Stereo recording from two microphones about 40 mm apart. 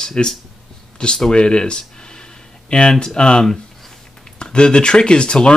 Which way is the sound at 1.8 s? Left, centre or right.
Left.